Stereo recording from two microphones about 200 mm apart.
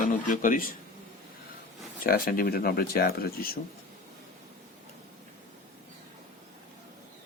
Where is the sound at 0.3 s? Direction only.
40° left (ahead or behind).